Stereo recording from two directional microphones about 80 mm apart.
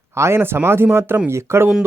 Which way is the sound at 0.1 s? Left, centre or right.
Right.